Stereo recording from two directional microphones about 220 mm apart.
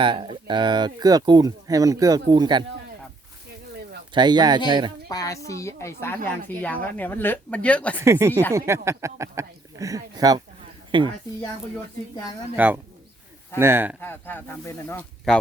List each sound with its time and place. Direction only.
0.0 s speech: 20° right (ahead or behind)
4.1 s speech: 20° right (ahead or behind)
5.0 s speech: 15° left (ahead or behind)
8.0 s speech: 10° right (ahead or behind)
8.3 s speech: 10° left (ahead or behind)
8.5 s speech: 15° right (ahead or behind)
12.5 s speech: 5° right (ahead or behind)
14.0 s speech: 10° left (ahead or behind)